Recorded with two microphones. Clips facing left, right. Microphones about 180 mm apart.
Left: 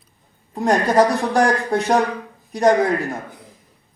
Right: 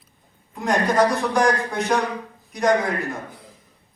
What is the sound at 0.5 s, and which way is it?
A woman's voice, 35° left (ahead or behind).